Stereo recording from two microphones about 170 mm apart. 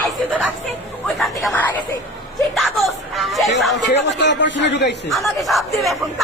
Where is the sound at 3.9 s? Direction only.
90° left.